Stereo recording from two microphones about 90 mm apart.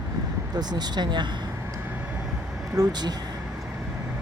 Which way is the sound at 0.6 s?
50° right (ahead or behind).